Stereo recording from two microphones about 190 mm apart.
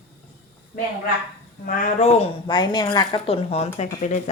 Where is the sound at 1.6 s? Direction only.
40° left (ahead or behind).